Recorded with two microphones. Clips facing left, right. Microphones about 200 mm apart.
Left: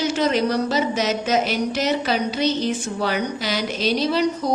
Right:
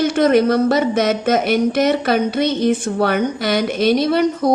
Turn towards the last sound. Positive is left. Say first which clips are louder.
# right 5 dB
turn(degrees=-55)  # may be behind; listen again after turning